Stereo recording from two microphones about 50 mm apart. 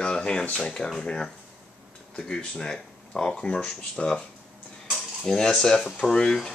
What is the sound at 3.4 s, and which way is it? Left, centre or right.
Speech, centre.